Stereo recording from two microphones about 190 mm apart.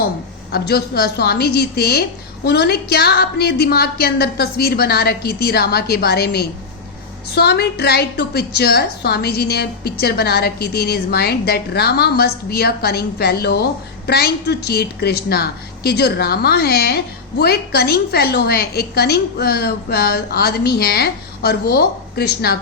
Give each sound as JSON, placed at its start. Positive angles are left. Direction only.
{"t": 0.5, "sound": "a woman's voice", "side_deg": 55}